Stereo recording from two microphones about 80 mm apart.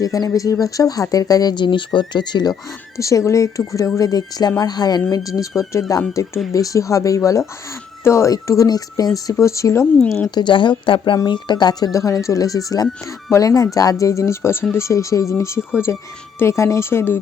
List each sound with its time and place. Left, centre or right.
0.0 s a woman's voice: left
1.5 s speech: left
3.0 s a woman's voice: left
5.4 s a woman's voice: left
10.3 s a woman's voice: left
11.3 s speech: left
11.9 s a woman's voice: left